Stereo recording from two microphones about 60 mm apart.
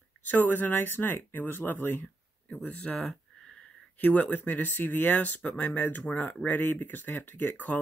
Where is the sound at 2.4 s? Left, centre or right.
Left.